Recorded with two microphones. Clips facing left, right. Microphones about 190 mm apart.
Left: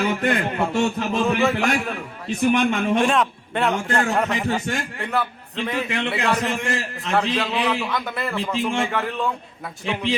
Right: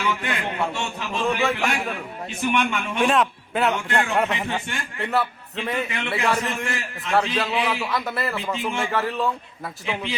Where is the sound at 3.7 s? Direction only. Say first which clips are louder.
Left 1 dB; 40° left (ahead or behind).